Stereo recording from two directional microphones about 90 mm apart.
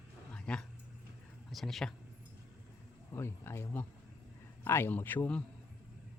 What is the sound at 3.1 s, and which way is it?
Speech, 30° left (ahead or behind).